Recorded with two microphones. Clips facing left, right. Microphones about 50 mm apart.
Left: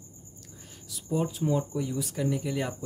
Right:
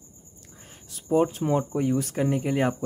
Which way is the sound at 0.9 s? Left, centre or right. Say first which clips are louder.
Right 7 dB; right.